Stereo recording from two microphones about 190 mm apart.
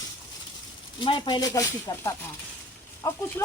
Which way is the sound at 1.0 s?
25° left (ahead or behind).